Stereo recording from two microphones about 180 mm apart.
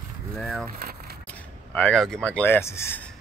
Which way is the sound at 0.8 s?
60° right (ahead or behind).